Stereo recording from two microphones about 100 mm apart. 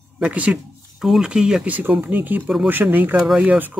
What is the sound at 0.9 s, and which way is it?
Speech, 5° right (ahead or behind).